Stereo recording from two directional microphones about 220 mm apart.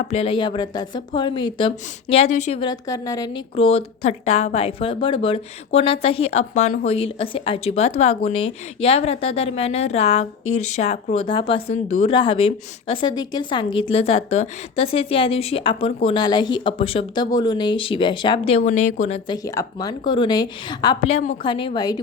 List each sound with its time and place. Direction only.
0.1 s speech: 25° left (ahead or behind)
12.1 s speech: 20° left (ahead or behind)
19.5 s speech: 15° left (ahead or behind)